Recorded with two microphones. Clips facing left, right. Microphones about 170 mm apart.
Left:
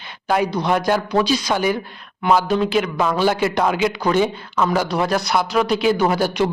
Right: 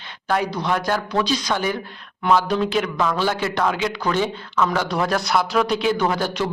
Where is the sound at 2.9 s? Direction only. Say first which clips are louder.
Left 3 dB; 15° left (ahead or behind).